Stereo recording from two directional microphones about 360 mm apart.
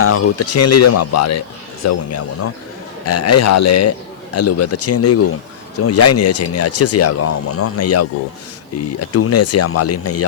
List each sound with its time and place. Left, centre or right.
0.0 s speech: left